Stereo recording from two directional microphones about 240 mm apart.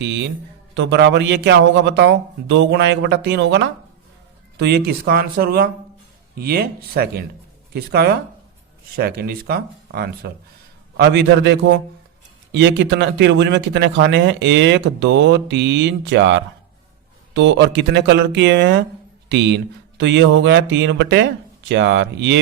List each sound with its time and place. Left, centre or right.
0.0 s speech: right